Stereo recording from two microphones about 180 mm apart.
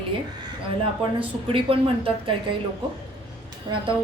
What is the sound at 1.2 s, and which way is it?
A woman's voice, 30° right (ahead or behind).